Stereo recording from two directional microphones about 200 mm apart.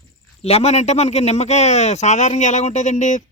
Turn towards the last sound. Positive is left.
turn(degrees=40)  # may be behind; listen again after turning